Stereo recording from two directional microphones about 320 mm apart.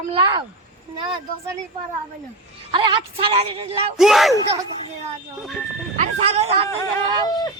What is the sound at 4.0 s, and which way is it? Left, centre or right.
Speech, centre.